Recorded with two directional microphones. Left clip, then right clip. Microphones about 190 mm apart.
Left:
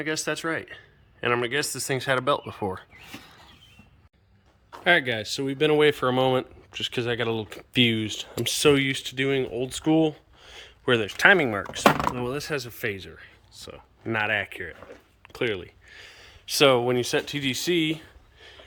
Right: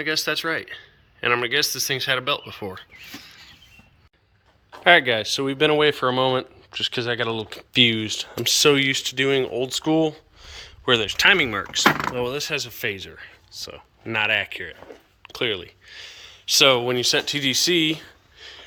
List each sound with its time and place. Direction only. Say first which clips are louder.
0.0 s speech: right 5 dB; 25° left (ahead or behind)
3.2 s a sound: right 5 dB; 40° left (ahead or behind)
4.8 s speech: right 6 dB; 5° left (ahead or behind)